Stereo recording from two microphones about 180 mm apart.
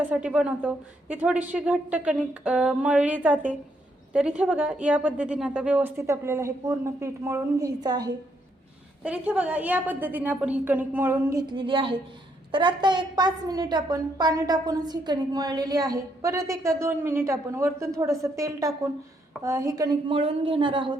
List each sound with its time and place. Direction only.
0.3 s a woman's voice: 5° right (ahead or behind); by 8.0 s 20° right (ahead or behind)
9.0 s a woman's voice: 5° right (ahead or behind); by 20.9 s 30° right (ahead or behind)